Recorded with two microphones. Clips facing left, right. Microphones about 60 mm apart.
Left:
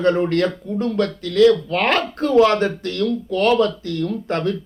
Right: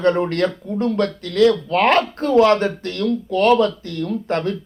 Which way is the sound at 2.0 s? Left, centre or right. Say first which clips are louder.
Even; right.